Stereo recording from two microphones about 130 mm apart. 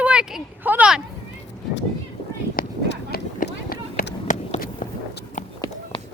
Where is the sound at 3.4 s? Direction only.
90° left.